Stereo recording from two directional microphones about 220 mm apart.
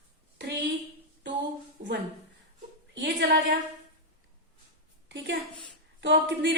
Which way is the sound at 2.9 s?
55° right (ahead or behind).